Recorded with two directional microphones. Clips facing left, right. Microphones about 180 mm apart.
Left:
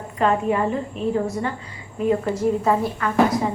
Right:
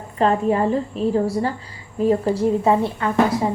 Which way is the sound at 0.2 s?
35° right (ahead or behind).